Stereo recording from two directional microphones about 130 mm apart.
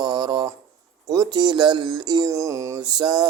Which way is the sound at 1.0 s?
30° right (ahead or behind).